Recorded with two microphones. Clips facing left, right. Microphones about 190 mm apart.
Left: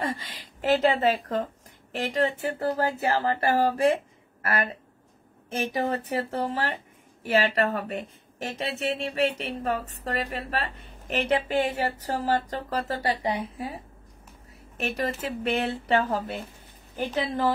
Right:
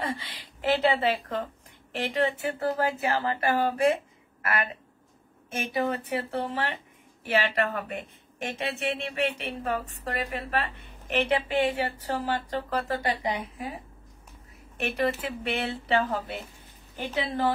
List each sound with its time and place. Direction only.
0.0 s a woman's voice: 45° left (ahead or behind)
14.8 s a woman's voice: 40° left (ahead or behind)